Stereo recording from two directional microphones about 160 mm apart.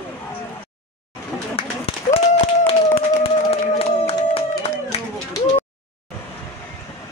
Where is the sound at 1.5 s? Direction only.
40° left (ahead or behind).